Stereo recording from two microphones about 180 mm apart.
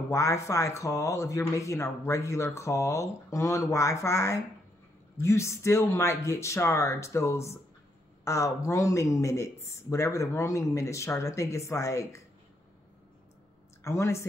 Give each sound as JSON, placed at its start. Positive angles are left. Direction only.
{"t": 0.1, "sound": "speech", "side_deg": 15}
{"t": 13.8, "sound": "speech", "side_deg": 15}